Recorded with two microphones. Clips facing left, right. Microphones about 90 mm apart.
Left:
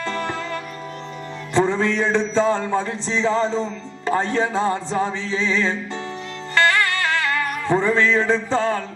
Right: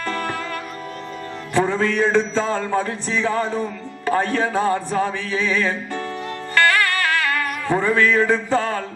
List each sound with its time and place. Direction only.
0.0 s music: 20° left (ahead or behind)
1.7 s music: 20° left (ahead or behind)